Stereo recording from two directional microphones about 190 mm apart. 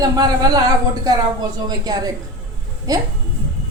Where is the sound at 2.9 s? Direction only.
20° right (ahead or behind).